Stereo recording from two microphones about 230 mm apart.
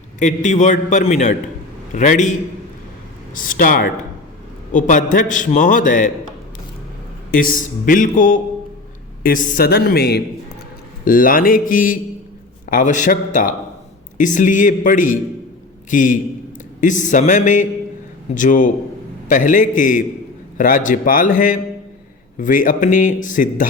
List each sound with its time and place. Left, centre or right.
0.2 s a man's voice: left
3.3 s a man's voice: left
7.3 s a man's voice: left